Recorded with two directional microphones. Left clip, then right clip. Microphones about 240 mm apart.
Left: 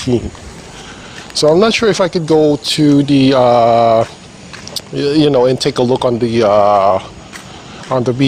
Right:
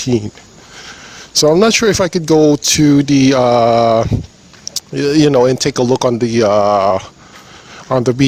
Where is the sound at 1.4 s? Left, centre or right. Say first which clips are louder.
Left 1 dB; right.